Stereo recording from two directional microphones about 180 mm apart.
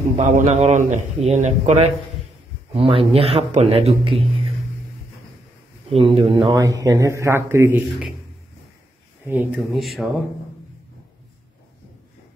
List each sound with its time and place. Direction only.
0.2 s a man's voice: 40° right (ahead or behind)
5.9 s a man's voice: 30° right (ahead or behind)
6.5 s a man's voice: 20° right (ahead or behind)
9.2 s speech: 10° right (ahead or behind)